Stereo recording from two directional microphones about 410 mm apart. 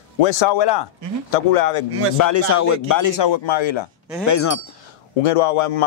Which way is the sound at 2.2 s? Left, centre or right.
Left.